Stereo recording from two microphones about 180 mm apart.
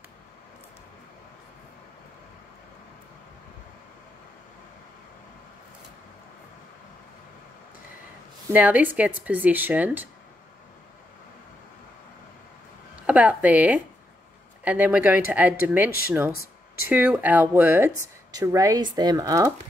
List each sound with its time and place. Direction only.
8.5 s a woman's voice: 10° right (ahead or behind)
13.0 s a woman's voice: 10° right (ahead or behind)
16.9 s a woman's voice: 10° right (ahead or behind)